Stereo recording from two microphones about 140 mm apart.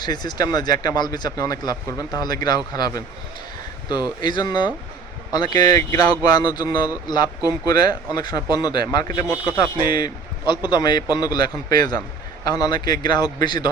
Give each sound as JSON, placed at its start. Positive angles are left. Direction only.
{"t": 0.0, "sound": "speech", "side_deg": 30}